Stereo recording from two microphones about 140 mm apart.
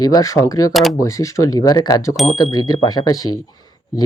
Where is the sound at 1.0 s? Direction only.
20° left (ahead or behind).